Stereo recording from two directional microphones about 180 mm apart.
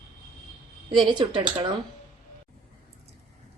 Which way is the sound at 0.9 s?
25° right (ahead or behind).